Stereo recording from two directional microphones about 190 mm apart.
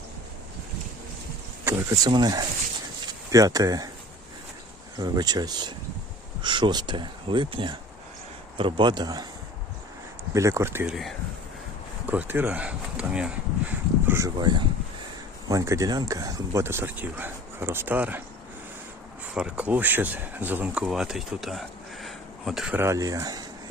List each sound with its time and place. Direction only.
1.6 s speech: 20° right (ahead or behind)
4.9 s speech: 20° right (ahead or behind)
10.3 s speech: 15° right (ahead or behind)
12.0 s speech: 10° right (ahead or behind)
14.1 s speech: 20° right (ahead or behind)
19.3 s speech: 5° right (ahead or behind)